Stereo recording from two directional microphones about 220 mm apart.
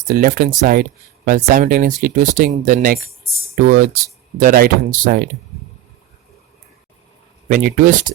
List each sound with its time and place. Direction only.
0.1 s speech: 40° right (ahead or behind)
7.4 s speech: 35° right (ahead or behind)